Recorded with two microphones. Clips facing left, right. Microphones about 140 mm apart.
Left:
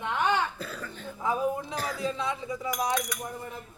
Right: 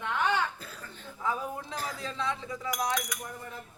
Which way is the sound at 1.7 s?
75° left (ahead or behind).